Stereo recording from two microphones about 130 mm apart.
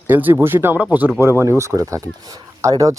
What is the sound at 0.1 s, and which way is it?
Speech, 15° right (ahead or behind).